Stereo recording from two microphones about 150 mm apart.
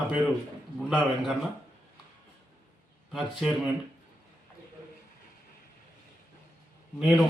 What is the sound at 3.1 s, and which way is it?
Speech, 5° right (ahead or behind).